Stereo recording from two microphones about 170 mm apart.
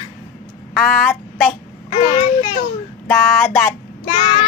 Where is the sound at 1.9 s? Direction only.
30° left (ahead or behind).